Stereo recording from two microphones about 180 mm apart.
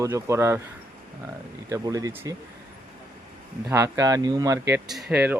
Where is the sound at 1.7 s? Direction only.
20° right (ahead or behind).